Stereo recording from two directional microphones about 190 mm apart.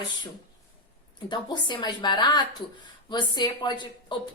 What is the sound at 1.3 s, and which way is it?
A woman's voice, 25° left (ahead or behind).